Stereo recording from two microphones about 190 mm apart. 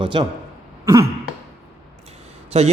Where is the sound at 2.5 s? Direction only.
35° right (ahead or behind).